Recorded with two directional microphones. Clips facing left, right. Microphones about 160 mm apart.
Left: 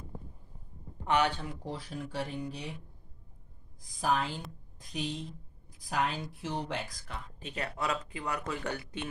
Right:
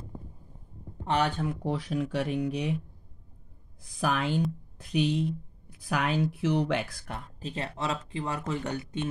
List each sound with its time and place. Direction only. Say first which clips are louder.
1.0 s speech: right 1 dB; 40° right (ahead or behind)
1.5 s speech: right 9 dB; 65° right (ahead or behind)
3.8 s speech: right 2 dB; 70° right (ahead or behind)
7.2 s speech: right 2 dB; 35° right (ahead or behind)